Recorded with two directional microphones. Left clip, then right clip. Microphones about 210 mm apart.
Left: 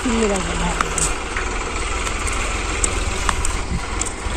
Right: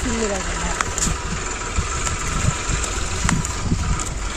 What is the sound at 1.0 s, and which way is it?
Vehicle, 60° right (ahead or behind).